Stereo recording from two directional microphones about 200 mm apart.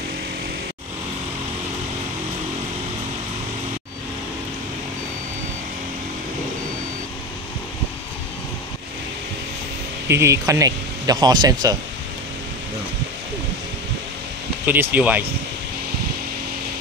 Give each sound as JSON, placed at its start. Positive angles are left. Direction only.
{"t": 10.0, "sound": "speech", "side_deg": -15}
{"t": 14.7, "sound": "speech", "side_deg": -10}